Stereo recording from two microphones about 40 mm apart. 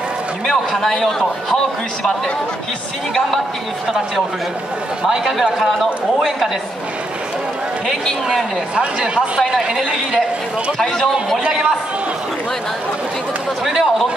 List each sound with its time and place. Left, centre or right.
0.5 s a man's voice: centre
5.0 s speech: centre
8.7 s speech: right
9.5 s speech: centre
13.7 s speech: centre